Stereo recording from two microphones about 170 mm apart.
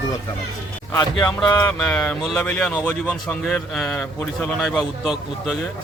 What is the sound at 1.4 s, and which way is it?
Speech, 5° left (ahead or behind).